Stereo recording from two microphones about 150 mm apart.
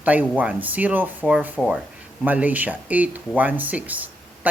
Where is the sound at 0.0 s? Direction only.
10° right (ahead or behind).